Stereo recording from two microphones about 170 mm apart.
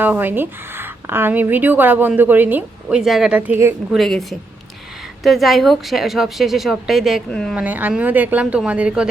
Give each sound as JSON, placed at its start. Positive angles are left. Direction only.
{"t": 0.0, "sound": "speech", "side_deg": -10}
{"t": 3.9, "sound": "speech", "side_deg": 0}
{"t": 7.5, "sound": "speech", "side_deg": -10}